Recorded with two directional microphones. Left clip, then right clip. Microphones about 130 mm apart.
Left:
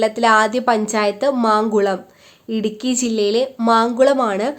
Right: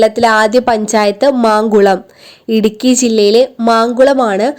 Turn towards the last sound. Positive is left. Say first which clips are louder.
# right 6 dB
turn(degrees=-40)  # may be behind; listen again after turning